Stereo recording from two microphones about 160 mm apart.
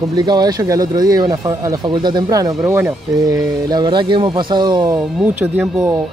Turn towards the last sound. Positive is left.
turn(degrees=-10)  # may be behind; listen again after turning